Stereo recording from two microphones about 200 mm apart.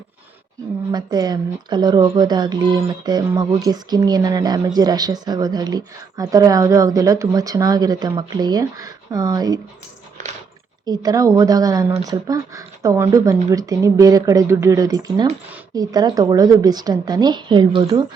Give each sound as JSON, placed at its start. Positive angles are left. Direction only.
{"t": 0.9, "sound": "speech", "side_deg": -20}
{"t": 10.8, "sound": "speech", "side_deg": -20}